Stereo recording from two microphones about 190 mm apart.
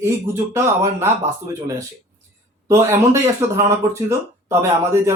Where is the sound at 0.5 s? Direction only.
15° right (ahead or behind).